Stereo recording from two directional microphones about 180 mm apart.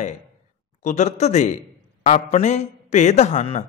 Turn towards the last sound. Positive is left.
turn(degrees=40)  # may be behind; listen again after turning